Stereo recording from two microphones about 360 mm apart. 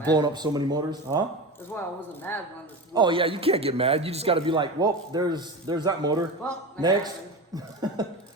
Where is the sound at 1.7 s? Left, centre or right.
Centre.